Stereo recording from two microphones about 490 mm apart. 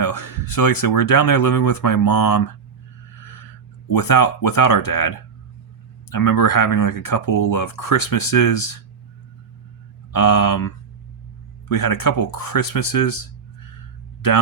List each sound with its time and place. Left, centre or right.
0.0 s speech: left
3.9 s speech: left
10.1 s speech: left
11.7 s speech: left